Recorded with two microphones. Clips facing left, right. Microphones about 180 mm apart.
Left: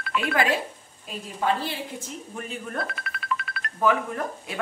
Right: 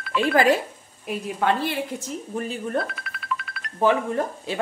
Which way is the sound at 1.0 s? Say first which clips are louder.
Right 3 dB; 60° right (ahead or behind).